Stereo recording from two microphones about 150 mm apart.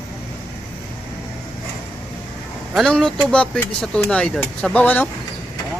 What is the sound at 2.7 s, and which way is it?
Speech, 5° left (ahead or behind).